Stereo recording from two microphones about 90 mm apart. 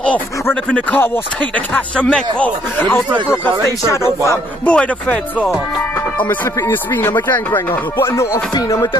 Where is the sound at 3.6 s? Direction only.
35° left (ahead or behind).